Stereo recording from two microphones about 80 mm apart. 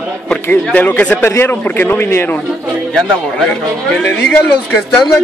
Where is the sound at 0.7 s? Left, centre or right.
Centre.